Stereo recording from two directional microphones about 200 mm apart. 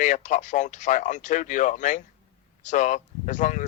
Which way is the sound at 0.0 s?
35° left (ahead or behind).